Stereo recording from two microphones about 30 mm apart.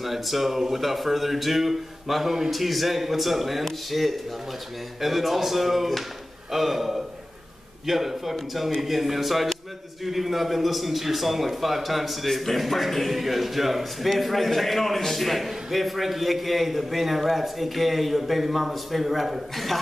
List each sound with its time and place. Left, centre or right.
0.0 s a man's voice: centre
19.5 s a man's voice: centre